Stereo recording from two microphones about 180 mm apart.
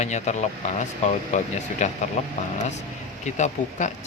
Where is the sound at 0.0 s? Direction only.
40° left (ahead or behind).